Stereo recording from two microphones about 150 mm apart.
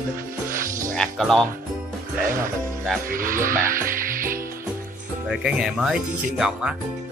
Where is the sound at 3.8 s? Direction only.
65° right (ahead or behind).